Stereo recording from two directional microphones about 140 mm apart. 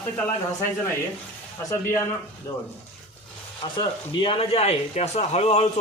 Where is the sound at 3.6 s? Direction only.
35° left (ahead or behind).